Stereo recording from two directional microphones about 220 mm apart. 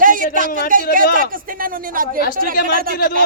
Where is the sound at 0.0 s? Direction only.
40° right (ahead or behind).